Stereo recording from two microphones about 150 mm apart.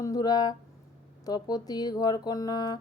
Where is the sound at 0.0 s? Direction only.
25° left (ahead or behind).